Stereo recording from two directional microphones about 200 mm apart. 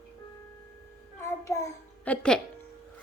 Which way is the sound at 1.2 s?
15° left (ahead or behind).